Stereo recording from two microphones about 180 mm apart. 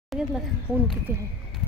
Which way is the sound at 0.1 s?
Centre (ahead or behind).